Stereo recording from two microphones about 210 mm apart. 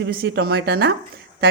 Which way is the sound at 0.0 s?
50° right (ahead or behind).